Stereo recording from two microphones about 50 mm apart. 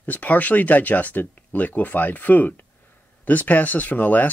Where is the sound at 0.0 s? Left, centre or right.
Left.